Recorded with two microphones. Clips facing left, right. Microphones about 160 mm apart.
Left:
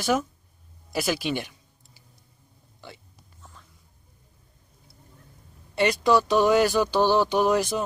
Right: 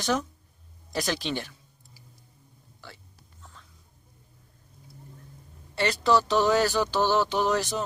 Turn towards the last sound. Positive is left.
turn(degrees=15)  # may be behind; listen again after turning